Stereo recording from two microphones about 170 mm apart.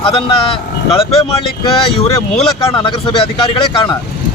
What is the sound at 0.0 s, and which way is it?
Speech, 30° left (ahead or behind).